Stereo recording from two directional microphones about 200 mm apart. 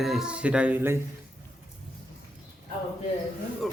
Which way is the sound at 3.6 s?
Centre (ahead or behind).